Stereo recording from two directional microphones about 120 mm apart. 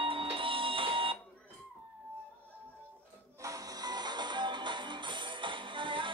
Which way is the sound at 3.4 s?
30° right (ahead or behind).